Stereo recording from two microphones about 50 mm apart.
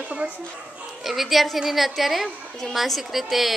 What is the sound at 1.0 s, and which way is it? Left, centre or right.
A woman's voice, centre.